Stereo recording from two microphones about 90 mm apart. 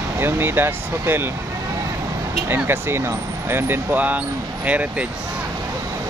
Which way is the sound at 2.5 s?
25° right (ahead or behind).